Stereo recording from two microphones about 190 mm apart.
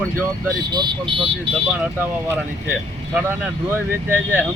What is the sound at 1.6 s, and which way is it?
Speech, 5° right (ahead or behind).